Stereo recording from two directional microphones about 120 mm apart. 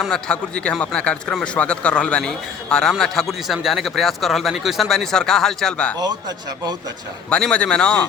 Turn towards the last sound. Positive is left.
turn(degrees=10)  # may be behind; listen again after turning